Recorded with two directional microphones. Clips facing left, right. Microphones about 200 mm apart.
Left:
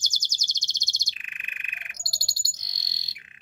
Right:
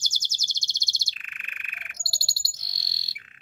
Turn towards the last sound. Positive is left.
turn(degrees=20)  # may be behind; listen again after turning